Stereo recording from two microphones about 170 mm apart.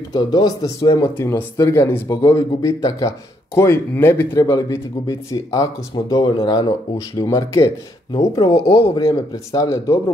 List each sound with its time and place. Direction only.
0.1 s speech: 25° left (ahead or behind)